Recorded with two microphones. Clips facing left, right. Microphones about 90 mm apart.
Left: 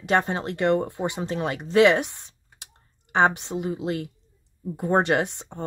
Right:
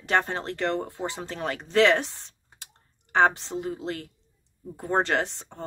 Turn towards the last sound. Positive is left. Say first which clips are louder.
# left 2 dB
turn(degrees=15)  # may be behind; listen again after turning